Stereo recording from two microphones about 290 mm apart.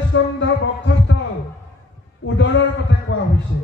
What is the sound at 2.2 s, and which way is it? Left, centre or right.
A man's voice, left.